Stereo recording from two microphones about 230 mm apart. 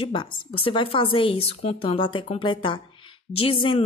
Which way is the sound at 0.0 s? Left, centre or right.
Left.